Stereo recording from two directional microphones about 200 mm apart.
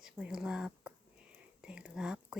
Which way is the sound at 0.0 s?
5° right (ahead or behind).